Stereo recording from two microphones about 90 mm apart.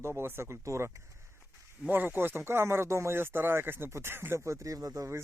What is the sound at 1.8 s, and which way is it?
Speech, 20° right (ahead or behind).